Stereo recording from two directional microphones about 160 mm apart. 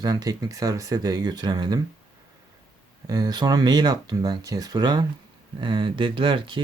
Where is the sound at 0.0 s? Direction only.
25° right (ahead or behind).